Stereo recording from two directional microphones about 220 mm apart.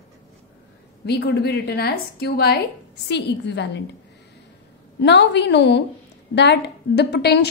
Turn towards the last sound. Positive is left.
turn(degrees=50)  # may be behind; listen again after turning